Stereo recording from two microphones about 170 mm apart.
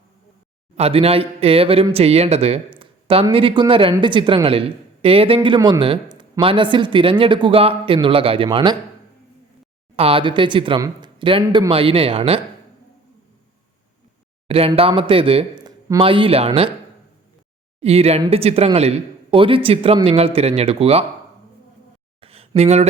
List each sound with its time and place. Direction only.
0.8 s speech: 35° right (ahead or behind)
9.9 s speech: 35° right (ahead or behind)
14.4 s speech: 35° right (ahead or behind)
17.7 s speech: 35° right (ahead or behind)
22.2 s a sound: 35° right (ahead or behind)